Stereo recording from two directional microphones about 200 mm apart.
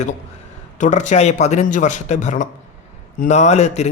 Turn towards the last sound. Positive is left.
turn(degrees=35)  # may be behind; listen again after turning